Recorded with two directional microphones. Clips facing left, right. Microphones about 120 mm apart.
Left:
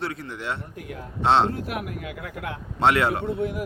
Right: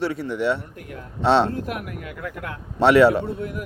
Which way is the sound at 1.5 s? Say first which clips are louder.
Right 1 dB; 45° right (ahead or behind).